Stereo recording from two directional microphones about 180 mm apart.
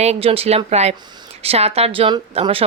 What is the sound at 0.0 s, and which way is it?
Speech, 35° right (ahead or behind).